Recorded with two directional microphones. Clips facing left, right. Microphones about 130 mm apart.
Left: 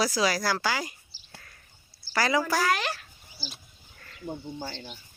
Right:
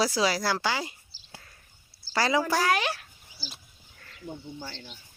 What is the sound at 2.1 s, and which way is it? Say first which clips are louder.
Speech: even; 25° right (ahead or behind).